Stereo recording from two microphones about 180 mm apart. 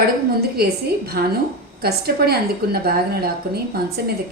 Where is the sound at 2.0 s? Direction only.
60° right (ahead or behind).